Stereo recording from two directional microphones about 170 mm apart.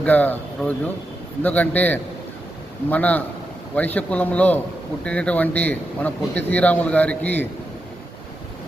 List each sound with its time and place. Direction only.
0.0 s a man's voice: 10° left (ahead or behind)